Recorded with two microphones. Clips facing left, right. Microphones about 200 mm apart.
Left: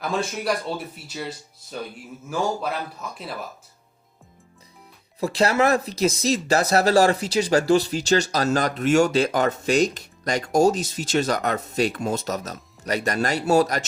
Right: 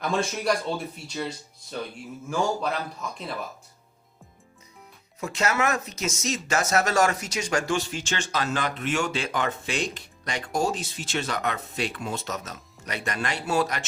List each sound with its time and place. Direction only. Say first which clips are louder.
0.0 s a man's voice: even; centre (ahead or behind)
5.2 s speech: left 6 dB; 35° left (ahead or behind)